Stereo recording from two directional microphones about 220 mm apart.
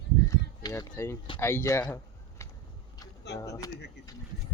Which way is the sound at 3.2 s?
50° left (ahead or behind).